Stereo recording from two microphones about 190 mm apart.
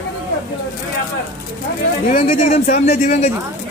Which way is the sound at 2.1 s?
40° left (ahead or behind).